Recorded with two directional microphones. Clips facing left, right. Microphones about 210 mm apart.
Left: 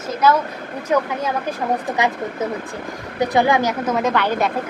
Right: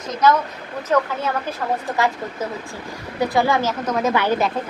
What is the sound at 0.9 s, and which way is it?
Speech, 10° left (ahead or behind).